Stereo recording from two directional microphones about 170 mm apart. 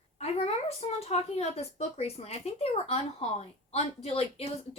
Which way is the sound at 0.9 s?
40° left (ahead or behind).